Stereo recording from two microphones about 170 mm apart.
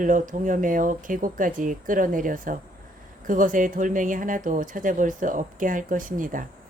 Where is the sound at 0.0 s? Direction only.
50° right (ahead or behind).